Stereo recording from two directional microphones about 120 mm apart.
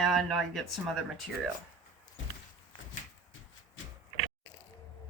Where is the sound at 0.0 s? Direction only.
Centre (ahead or behind).